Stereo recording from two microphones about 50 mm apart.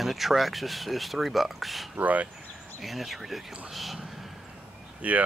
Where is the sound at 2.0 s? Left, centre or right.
Right.